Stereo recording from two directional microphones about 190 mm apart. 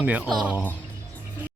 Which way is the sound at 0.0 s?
5° right (ahead or behind).